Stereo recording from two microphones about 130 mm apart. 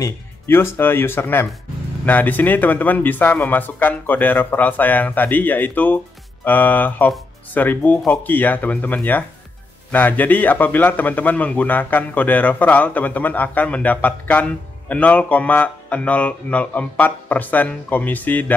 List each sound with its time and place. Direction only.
0.0 s a man's voice: 15° left (ahead or behind)